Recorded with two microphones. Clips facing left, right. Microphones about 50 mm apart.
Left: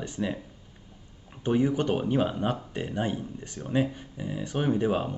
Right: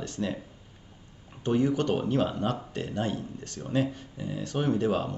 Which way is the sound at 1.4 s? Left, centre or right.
Centre.